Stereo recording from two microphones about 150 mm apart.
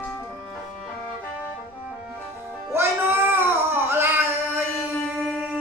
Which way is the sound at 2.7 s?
15° right (ahead or behind).